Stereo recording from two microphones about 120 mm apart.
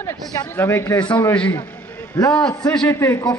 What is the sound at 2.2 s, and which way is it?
A man's voice, 30° left (ahead or behind).